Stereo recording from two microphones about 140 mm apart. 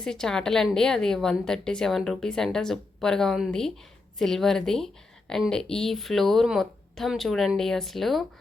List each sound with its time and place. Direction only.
0.0 s a woman's voice: 5° left (ahead or behind)